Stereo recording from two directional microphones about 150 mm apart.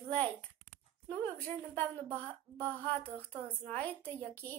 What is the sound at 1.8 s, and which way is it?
A woman's voice, 10° left (ahead or behind).